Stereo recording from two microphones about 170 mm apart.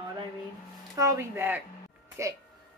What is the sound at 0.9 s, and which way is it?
Speech, 20° right (ahead or behind).